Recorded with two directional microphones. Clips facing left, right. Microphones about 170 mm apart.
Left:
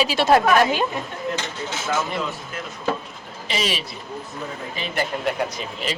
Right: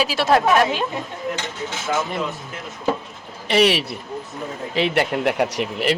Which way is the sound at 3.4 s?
65° right (ahead or behind).